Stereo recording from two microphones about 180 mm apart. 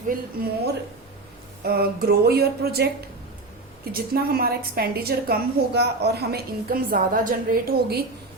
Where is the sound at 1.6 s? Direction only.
60° right (ahead or behind).